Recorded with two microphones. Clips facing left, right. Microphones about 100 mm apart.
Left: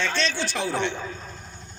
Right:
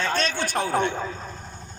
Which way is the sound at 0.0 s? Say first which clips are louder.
Right 1 dB; 45° right (ahead or behind).